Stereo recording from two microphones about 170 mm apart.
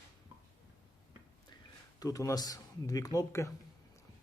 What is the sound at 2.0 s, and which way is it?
Speech, 20° left (ahead or behind).